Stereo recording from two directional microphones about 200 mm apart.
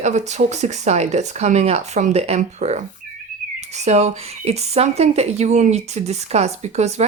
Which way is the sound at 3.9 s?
35° right (ahead or behind).